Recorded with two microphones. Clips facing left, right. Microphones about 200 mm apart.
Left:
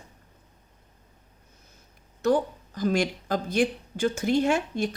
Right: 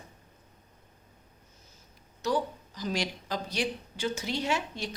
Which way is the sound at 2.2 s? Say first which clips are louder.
Left 6 dB; 55° left (ahead or behind).